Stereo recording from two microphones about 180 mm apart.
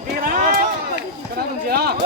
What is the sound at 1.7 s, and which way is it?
Speech, 60° right (ahead or behind).